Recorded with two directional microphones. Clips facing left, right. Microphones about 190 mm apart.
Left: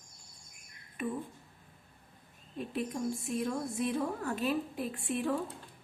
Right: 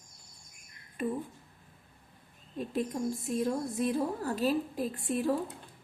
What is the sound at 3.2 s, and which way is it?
A woman's voice, 40° right (ahead or behind).